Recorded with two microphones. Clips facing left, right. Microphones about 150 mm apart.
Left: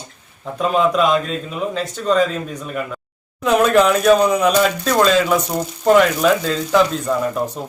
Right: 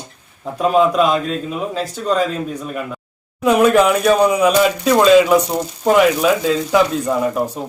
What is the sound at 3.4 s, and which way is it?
Speech, 5° right (ahead or behind).